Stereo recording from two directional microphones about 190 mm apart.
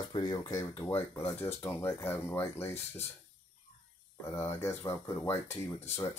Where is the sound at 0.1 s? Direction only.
20° left (ahead or behind).